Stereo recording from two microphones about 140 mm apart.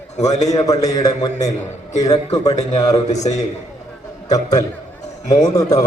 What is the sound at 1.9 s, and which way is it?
A man's voice, 50° left (ahead or behind).